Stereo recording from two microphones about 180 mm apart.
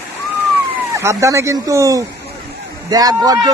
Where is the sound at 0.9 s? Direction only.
15° right (ahead or behind).